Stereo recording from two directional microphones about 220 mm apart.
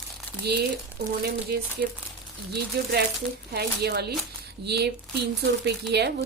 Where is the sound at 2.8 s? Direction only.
45° right (ahead or behind).